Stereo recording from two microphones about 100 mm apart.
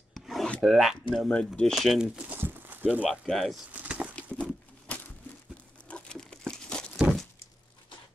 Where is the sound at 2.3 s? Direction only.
20° right (ahead or behind).